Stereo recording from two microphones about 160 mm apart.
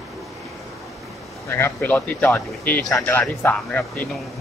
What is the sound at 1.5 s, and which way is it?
Speech, 15° left (ahead or behind).